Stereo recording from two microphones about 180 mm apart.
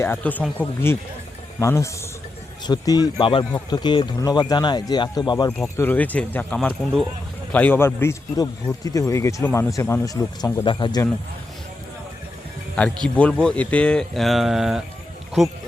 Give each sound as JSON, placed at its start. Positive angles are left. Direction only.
{"t": 0.0, "sound": "speech", "side_deg": 10}
{"t": 5.6, "sound": "speech", "side_deg": 15}
{"t": 13.1, "sound": "speech", "side_deg": 5}